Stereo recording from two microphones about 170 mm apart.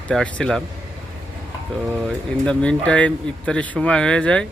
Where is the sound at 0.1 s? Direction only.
5° left (ahead or behind).